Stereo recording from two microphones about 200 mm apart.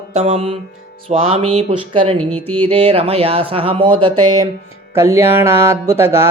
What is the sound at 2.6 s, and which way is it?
Speech, 30° right (ahead or behind).